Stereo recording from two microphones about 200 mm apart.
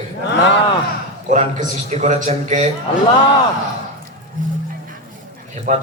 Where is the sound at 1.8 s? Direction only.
35° right (ahead or behind).